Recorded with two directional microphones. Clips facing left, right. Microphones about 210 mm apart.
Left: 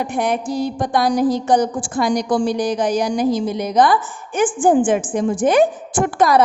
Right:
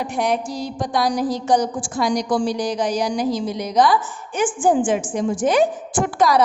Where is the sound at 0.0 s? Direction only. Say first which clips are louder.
Left 1 dB; 55° left (ahead or behind).